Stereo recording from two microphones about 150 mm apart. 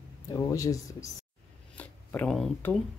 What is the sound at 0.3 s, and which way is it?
Speech, 25° left (ahead or behind).